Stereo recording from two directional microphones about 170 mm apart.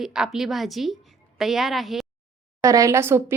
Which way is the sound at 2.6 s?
20° right (ahead or behind).